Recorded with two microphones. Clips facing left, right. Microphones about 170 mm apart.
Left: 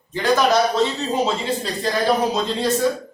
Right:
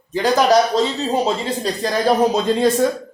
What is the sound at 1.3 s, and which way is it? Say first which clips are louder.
Speech: right 2 dB; 40° right (ahead or behind).